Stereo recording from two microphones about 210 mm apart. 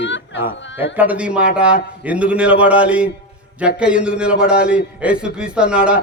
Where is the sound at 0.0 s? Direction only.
60° left (ahead or behind).